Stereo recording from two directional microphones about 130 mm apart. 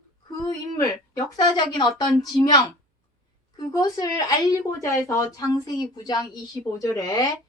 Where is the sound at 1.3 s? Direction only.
30° left (ahead or behind).